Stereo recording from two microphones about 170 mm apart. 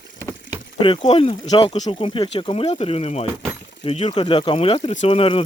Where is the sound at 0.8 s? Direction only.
35° left (ahead or behind).